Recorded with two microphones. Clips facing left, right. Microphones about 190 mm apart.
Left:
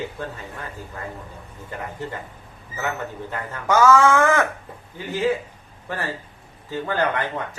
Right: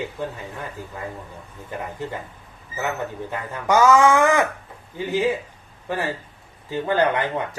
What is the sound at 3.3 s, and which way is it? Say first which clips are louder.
Speech: right 1 dB; 15° right (ahead or behind).